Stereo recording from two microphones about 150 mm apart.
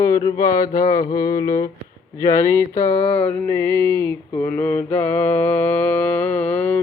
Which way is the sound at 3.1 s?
10° left (ahead or behind).